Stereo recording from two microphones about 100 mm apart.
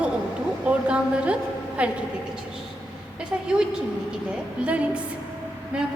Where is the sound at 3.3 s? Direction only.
15° right (ahead or behind).